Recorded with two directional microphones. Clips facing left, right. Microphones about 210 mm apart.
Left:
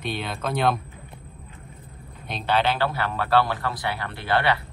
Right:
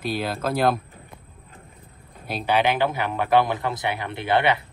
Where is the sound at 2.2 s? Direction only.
15° right (ahead or behind).